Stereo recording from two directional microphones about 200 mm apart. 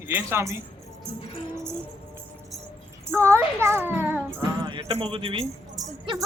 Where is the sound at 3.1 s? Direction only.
15° right (ahead or behind).